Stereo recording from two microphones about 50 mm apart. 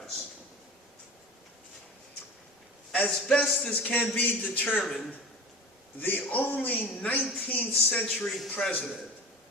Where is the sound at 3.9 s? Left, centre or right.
Left.